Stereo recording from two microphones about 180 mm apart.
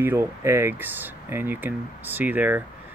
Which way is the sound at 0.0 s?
15° right (ahead or behind).